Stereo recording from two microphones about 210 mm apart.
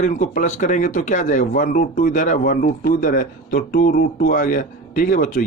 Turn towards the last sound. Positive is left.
turn(degrees=40)  # may be behind; listen again after turning